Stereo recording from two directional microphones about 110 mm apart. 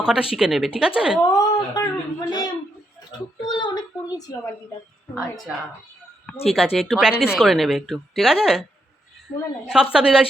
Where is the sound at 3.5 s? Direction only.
40° left (ahead or behind).